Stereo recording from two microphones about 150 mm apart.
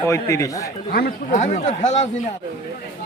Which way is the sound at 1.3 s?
55° left (ahead or behind).